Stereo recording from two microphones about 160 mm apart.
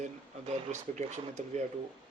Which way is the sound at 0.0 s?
45° right (ahead or behind).